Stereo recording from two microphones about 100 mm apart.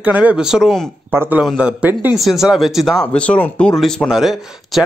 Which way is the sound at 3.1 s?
15° left (ahead or behind).